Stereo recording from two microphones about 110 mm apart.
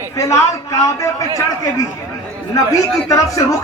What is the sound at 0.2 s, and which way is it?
Speech, 25° left (ahead or behind).